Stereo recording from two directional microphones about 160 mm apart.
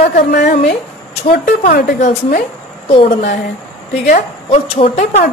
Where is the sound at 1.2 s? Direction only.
50° left (ahead or behind).